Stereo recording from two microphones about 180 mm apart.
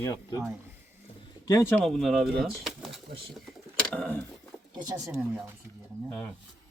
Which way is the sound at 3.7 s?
5° left (ahead or behind).